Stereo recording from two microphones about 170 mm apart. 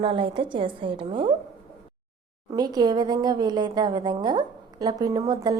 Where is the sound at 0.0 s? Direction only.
30° right (ahead or behind).